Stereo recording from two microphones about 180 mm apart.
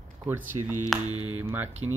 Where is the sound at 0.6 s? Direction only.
30° right (ahead or behind).